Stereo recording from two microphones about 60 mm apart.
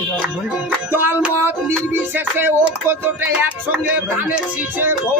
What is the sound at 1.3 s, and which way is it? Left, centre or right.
Music, right.